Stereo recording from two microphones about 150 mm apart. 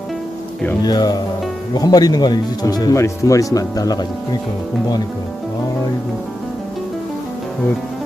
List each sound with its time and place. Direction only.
0.9 s speech: 25° left (ahead or behind)